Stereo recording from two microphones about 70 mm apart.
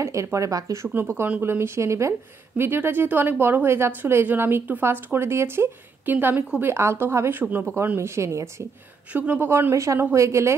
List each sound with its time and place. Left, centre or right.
0.0 s speech: right
0.8 s a woman's voice: right
6.1 s a woman's voice: right
6.6 s a woman's voice: right
9.1 s a woman's voice: right